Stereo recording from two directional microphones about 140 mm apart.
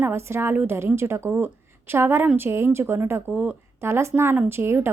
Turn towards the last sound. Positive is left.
turn(degrees=-15)  # may be behind; listen again after turning